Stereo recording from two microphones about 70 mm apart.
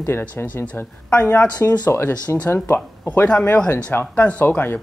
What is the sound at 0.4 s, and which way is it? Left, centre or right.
Speech, left.